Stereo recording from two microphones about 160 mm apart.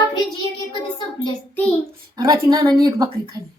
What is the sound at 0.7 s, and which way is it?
Child singing, 30° left (ahead or behind).